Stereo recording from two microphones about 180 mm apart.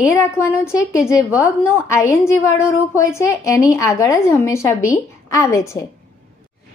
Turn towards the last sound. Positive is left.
turn(degrees=15)  # may be behind; listen again after turning